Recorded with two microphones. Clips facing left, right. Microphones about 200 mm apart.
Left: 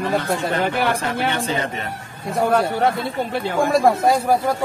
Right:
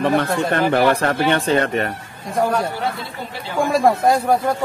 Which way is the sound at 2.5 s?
60° left (ahead or behind).